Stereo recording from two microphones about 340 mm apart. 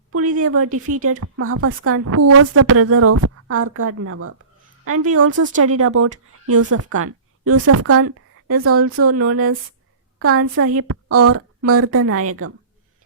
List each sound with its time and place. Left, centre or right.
0.1 s a sound: right
0.4 s a woman's voice: right
0.7 s speech: right
1.2 s a woman's voice: right